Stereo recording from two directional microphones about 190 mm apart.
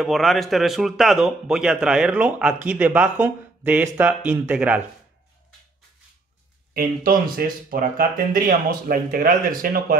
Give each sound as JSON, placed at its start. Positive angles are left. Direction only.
{"t": 0.0, "sound": "a man's voice", "side_deg": 0}
{"t": 6.7, "sound": "speech", "side_deg": -50}